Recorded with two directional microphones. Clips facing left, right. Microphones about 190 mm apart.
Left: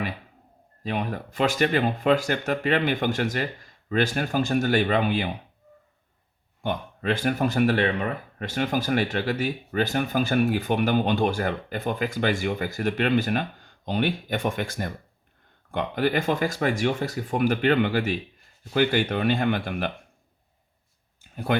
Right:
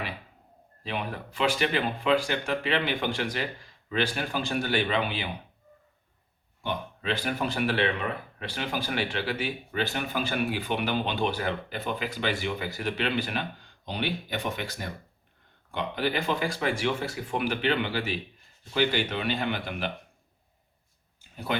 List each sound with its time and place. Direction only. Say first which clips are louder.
0.8 s speech: left 5 dB; 45° left (ahead or behind)
6.6 s speech: left 4 dB; 50° left (ahead or behind)
21.2 s a sound: left 5 dB; 50° left (ahead or behind)